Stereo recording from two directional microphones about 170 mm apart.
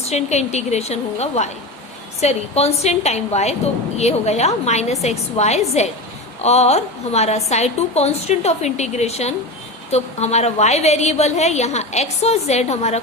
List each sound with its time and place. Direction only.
0.0 s a woman's voice: 40° left (ahead or behind)